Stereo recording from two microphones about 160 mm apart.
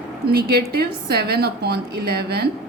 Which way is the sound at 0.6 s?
80° right.